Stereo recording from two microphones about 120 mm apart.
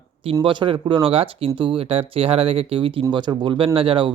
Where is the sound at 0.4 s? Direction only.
45° right (ahead or behind).